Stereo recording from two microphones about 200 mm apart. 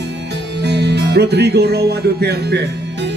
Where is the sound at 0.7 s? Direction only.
55° right (ahead or behind).